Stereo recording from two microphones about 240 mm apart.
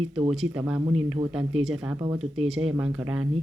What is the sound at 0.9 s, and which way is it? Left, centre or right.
Speech, right.